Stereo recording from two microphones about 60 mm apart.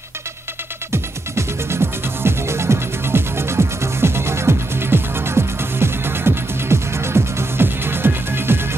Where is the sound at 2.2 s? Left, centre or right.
Right.